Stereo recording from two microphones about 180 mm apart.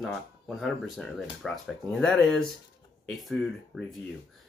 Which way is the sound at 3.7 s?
Centre (ahead or behind).